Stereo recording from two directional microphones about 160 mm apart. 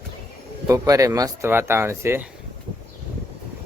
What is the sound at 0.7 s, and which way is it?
Speech, 20° right (ahead or behind).